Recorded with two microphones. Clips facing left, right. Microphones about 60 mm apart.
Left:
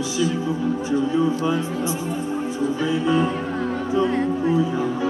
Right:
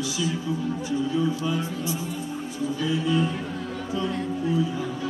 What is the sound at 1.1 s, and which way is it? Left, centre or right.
Speech, left.